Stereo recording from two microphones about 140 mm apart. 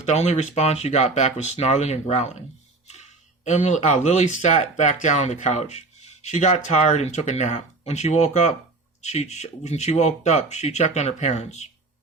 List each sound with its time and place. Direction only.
0.0 s speech: 55° left (ahead or behind)
3.4 s speech: 55° left (ahead or behind)